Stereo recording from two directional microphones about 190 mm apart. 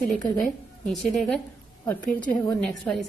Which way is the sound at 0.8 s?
Centre (ahead or behind).